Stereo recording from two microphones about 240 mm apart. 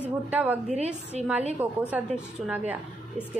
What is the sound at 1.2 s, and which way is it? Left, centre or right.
Speech, right.